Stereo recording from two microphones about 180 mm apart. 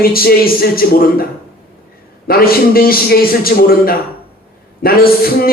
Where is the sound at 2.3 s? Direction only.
55° left (ahead or behind).